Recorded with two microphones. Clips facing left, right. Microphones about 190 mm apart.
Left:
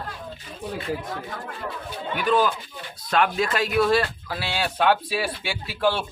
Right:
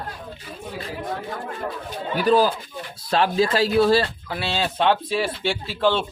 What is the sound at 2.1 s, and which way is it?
Speech, 35° right (ahead or behind).